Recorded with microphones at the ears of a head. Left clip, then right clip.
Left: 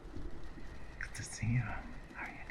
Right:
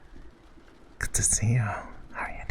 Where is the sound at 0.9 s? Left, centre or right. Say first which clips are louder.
Right 15 dB; right.